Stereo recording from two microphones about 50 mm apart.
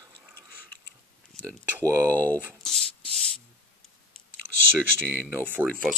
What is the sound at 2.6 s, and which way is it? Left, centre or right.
Sanding, centre.